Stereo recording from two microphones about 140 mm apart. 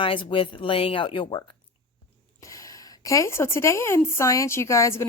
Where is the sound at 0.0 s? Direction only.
40° left (ahead or behind).